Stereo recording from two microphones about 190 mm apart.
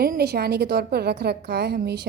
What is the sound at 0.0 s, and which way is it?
A woman's voice, 55° right (ahead or behind).